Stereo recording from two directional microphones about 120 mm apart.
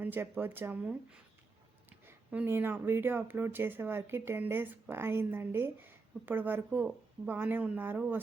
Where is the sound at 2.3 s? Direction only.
15° right (ahead or behind).